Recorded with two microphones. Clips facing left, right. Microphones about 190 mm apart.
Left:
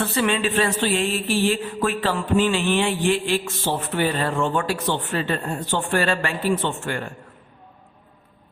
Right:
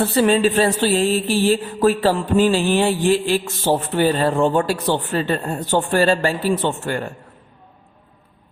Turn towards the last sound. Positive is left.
turn(degrees=-40)  # may be behind; listen again after turning